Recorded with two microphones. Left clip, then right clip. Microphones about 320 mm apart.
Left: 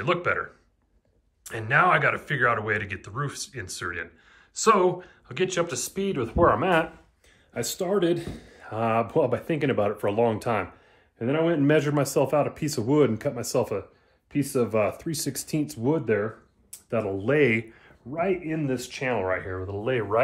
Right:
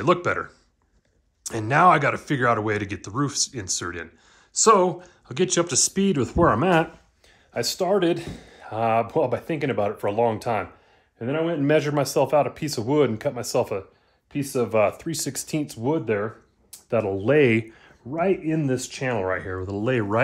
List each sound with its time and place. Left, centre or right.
0.0 s speech: centre; by 6.9 s right
7.5 s speech: right
16.9 s speech: right